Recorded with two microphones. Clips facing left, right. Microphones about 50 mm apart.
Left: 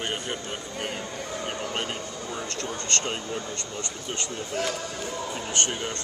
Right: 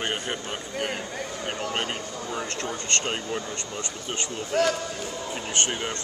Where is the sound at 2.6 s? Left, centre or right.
Right.